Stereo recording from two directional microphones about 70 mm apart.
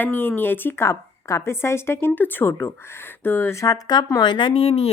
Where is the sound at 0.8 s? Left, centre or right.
Left.